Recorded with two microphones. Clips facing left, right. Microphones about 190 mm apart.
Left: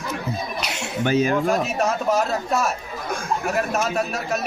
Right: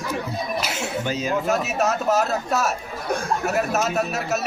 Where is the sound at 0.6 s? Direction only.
5° right (ahead or behind).